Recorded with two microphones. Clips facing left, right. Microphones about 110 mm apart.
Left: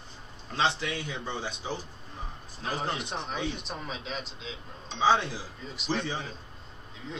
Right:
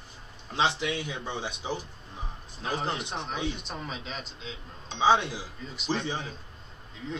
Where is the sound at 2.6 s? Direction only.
Centre (ahead or behind).